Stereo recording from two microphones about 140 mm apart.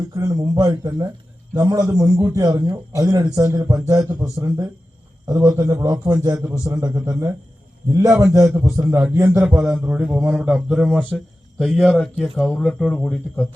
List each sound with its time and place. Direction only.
0.1 s a man's voice: 25° right (ahead or behind)
9.4 s a sound: 15° right (ahead or behind)
11.6 s speech: centre (ahead or behind)